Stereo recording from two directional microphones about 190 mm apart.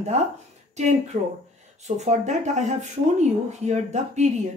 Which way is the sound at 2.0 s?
40° right (ahead or behind).